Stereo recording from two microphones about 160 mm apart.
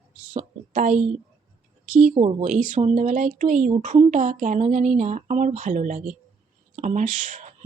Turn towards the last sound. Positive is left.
turn(degrees=-50)  # may be behind; listen again after turning